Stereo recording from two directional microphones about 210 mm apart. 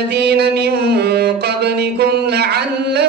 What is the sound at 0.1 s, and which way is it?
Music, 50° right (ahead or behind).